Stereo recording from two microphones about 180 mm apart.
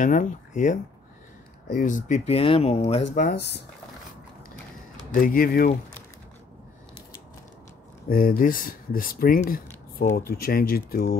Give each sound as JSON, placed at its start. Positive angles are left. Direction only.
{"t": 0.0, "sound": "speech", "side_deg": 45}
{"t": 1.8, "sound": "speech", "side_deg": 45}
{"t": 3.2, "sound": "speech", "side_deg": 60}
{"t": 5.1, "sound": "speech", "side_deg": 55}
{"t": 8.1, "sound": "speech", "side_deg": 50}